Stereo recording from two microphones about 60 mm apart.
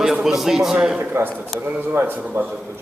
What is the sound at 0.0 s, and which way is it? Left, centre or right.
Speech, centre.